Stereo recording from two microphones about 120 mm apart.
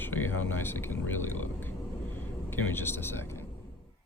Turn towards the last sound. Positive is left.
turn(degrees=20)  # may be behind; listen again after turning